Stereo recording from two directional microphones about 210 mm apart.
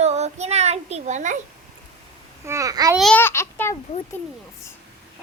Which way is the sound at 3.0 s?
5° left (ahead or behind).